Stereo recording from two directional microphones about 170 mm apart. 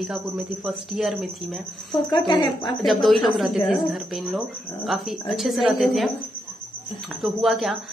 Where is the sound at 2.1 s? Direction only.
25° left (ahead or behind).